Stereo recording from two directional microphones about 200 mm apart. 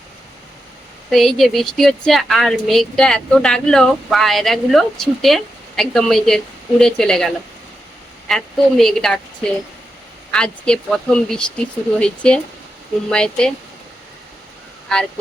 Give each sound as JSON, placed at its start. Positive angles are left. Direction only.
{"t": 1.1, "sound": "a woman's voice", "side_deg": 0}